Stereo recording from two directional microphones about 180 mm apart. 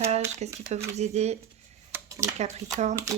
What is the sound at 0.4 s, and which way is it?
Speech, 40° right (ahead or behind).